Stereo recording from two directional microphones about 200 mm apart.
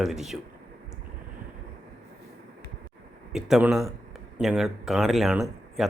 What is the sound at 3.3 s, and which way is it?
Speech, 5° right (ahead or behind).